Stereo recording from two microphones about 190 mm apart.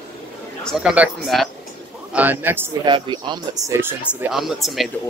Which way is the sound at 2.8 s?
25° right (ahead or behind).